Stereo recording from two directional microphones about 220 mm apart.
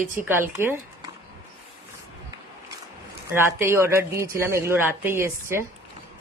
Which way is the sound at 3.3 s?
10° right (ahead or behind).